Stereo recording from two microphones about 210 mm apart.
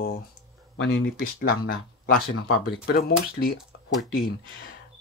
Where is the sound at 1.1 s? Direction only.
45° left (ahead or behind).